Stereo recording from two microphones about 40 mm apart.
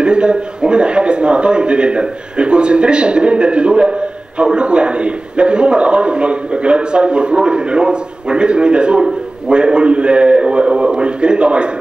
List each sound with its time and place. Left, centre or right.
0.0 s a man's voice: right